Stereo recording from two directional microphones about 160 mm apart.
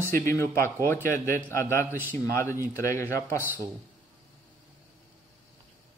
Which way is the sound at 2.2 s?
15° left (ahead or behind).